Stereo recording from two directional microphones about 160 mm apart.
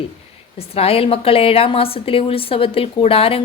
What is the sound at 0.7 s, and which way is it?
A woman's voice, 35° left (ahead or behind).